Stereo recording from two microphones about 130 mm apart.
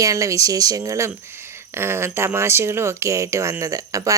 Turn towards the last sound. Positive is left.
turn(degrees=-25)  # may be behind; listen again after turning